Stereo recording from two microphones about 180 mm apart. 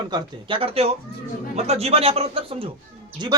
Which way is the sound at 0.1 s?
25° right (ahead or behind).